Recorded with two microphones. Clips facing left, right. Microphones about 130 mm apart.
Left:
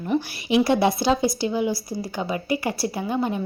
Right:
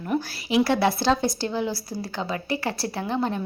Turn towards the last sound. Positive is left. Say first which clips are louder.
# left 1 dB
turn(degrees=10)  # may be behind; listen again after turning